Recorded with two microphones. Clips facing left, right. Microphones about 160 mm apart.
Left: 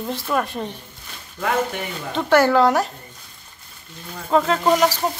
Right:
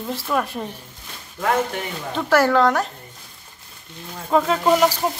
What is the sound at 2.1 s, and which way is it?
Speech, centre (ahead or behind).